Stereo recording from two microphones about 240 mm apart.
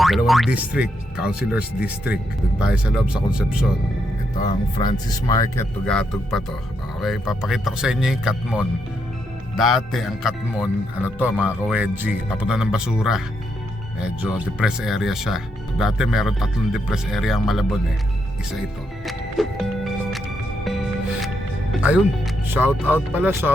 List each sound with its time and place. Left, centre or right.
0.0 s speech: centre
4.8 s speech: centre
19.0 s music: centre
22.5 s speech: centre